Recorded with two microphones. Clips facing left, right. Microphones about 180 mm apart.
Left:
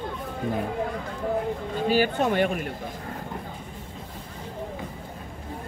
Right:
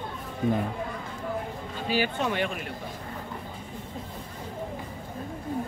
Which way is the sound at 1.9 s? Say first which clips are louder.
Left 5 dB; 45° left (ahead or behind).